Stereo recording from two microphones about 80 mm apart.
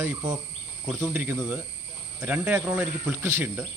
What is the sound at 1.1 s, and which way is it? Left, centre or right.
Speech, right.